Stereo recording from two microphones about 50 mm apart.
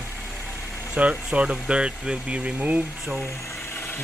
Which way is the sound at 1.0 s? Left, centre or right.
Right.